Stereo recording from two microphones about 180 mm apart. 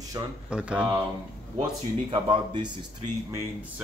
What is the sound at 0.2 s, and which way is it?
Speech, 25° right (ahead or behind).